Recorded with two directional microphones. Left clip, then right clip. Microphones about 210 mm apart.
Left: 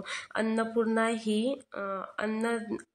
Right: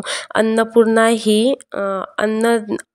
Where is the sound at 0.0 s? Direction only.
45° right (ahead or behind).